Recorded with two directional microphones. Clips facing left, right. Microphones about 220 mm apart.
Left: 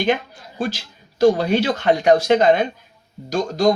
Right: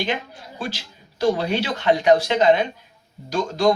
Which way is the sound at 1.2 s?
45° left (ahead or behind).